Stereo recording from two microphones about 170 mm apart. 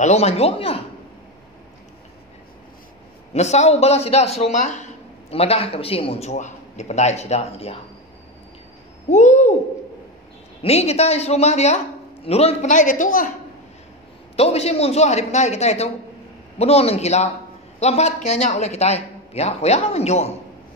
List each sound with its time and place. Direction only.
0.0 s a man's voice: 40° left (ahead or behind)
3.3 s a man's voice: 40° left (ahead or behind)
9.1 s speech: 45° left (ahead or behind)
10.6 s a man's voice: 40° left (ahead or behind)
14.3 s a man's voice: 35° left (ahead or behind)